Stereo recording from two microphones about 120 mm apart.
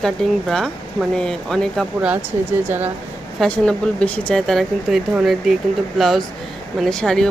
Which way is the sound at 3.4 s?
5° left (ahead or behind).